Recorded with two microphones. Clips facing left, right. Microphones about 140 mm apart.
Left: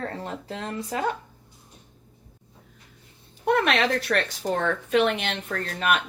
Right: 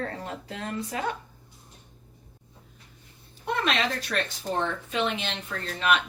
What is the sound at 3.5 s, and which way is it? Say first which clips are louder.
Speech: left 5 dB; 65° left (ahead or behind).